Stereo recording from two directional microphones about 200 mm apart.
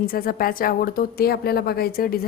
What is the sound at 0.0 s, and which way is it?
A woman's voice, 45° left (ahead or behind).